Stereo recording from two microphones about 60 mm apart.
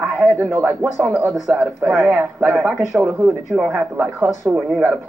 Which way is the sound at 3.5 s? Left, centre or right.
Centre.